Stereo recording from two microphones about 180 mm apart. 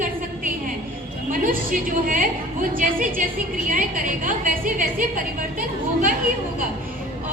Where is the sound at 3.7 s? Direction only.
45° right (ahead or behind).